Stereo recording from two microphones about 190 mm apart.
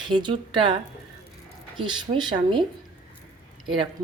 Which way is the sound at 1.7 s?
25° right (ahead or behind).